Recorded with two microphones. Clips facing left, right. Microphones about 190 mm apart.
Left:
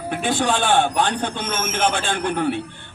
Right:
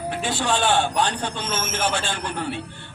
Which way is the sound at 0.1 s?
55° left (ahead or behind).